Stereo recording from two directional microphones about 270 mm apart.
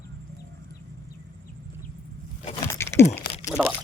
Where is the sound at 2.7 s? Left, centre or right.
Centre.